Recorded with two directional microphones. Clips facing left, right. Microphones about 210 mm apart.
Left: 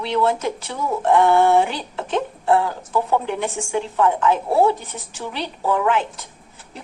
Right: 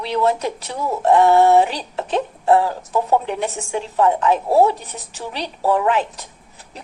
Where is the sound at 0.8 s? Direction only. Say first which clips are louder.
Right 2 dB; 35° right (ahead or behind).